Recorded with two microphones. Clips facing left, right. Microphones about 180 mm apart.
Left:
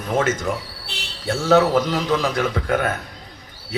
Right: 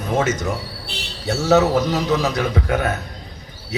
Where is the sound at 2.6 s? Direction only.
50° left (ahead or behind).